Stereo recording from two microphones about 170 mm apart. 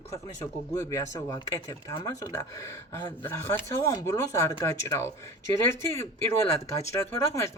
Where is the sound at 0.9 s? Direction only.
20° left (ahead or behind).